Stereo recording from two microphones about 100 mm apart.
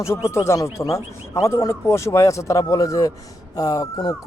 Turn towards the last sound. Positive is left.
turn(degrees=35)  # may be behind; listen again after turning